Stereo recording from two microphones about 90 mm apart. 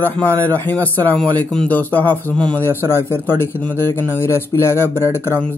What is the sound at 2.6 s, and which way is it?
Speech, 25° left (ahead or behind).